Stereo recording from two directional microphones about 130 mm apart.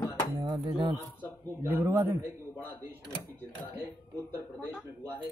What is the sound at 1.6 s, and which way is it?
Speech, 15° right (ahead or behind).